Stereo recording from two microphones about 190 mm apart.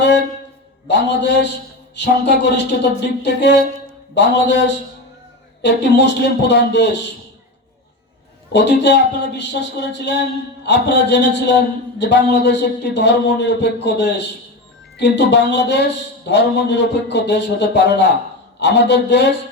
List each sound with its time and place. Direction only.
0.9 s a man's voice: 65° left (ahead or behind)
8.5 s a man's voice: 65° left (ahead or behind)